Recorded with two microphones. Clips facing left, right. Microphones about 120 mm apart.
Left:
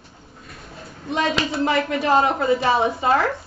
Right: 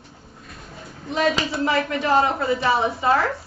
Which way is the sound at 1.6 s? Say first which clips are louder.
Left 1 dB; 30° left (ahead or behind).